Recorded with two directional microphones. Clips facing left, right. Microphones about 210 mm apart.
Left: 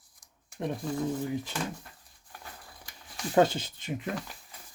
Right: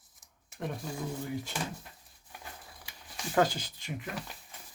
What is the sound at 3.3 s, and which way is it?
Speech, 25° left (ahead or behind).